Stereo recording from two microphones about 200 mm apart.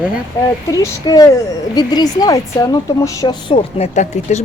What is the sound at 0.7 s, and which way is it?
A woman's voice, 20° left (ahead or behind).